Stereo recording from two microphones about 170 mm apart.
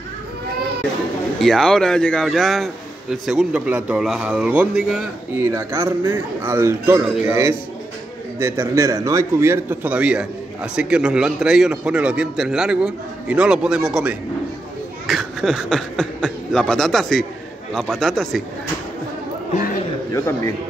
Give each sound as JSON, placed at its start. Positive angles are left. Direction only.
{"t": 1.4, "sound": "a man's voice", "side_deg": 0}
{"t": 5.4, "sound": "a man's voice", "side_deg": -15}
{"t": 20.1, "sound": "a man's voice", "side_deg": 15}